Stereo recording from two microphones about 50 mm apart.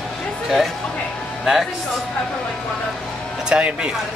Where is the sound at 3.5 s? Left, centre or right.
Centre.